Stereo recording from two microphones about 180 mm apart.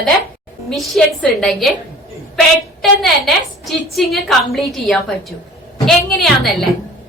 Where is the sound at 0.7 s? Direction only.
Centre (ahead or behind).